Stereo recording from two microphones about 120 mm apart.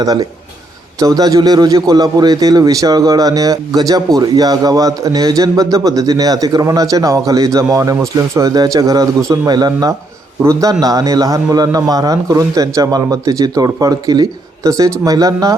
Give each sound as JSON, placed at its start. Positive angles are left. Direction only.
{"t": 0.0, "sound": "a man's voice", "side_deg": -30}